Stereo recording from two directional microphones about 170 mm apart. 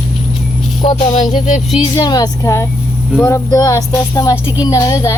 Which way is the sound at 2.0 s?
25° left (ahead or behind).